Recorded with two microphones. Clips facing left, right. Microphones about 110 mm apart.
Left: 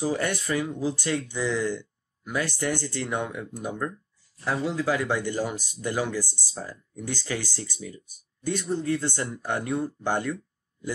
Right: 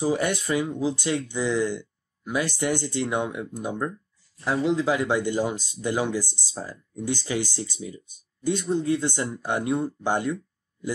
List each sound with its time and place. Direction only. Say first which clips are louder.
0.0 s speech: right 3 dB; 15° right (ahead or behind)